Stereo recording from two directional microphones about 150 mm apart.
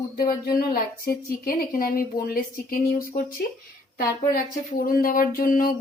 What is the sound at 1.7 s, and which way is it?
Speech, 75° left (ahead or behind).